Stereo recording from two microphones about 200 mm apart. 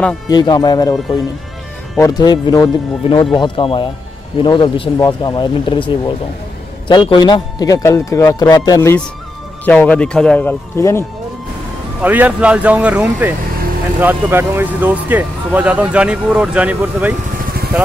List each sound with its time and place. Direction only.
0.3 s speech: 20° left (ahead or behind)
2.0 s speech: 20° left (ahead or behind)
12.0 s speech: 10° right (ahead or behind)